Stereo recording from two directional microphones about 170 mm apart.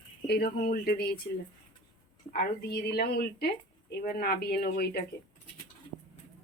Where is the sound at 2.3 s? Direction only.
75° left (ahead or behind).